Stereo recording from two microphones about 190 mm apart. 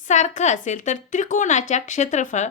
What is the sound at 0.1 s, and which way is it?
A woman's voice, 40° left (ahead or behind).